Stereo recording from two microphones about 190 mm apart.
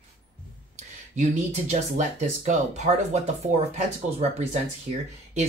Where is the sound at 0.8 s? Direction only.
35° right (ahead or behind).